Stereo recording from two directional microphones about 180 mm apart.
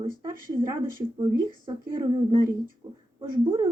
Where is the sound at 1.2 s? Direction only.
25° right (ahead or behind).